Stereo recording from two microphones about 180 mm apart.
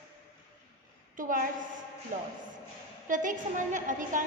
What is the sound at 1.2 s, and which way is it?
A woman's voice, 50° right (ahead or behind).